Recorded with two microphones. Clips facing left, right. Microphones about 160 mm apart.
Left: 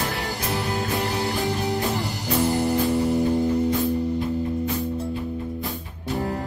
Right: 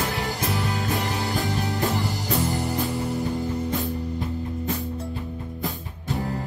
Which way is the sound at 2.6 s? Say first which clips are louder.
Left 5 dB; 20° left (ahead or behind).